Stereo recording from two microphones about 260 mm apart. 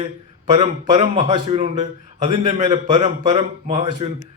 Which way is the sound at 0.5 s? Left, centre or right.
Right.